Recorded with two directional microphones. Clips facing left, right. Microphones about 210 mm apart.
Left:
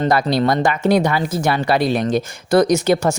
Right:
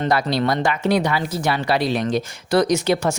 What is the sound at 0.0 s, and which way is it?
Speech, 45° left (ahead or behind).